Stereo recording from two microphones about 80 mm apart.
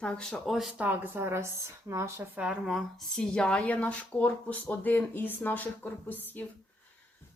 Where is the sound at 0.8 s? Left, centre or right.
Right.